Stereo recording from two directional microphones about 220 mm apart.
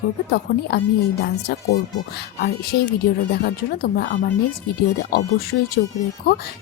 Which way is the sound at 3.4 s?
40° left (ahead or behind).